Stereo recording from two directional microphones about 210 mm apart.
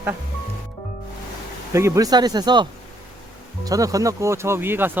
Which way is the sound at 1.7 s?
15° right (ahead or behind).